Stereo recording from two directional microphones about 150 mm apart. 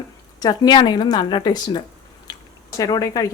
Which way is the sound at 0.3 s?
25° left (ahead or behind).